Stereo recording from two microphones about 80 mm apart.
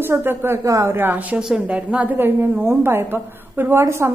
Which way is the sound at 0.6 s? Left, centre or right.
Right.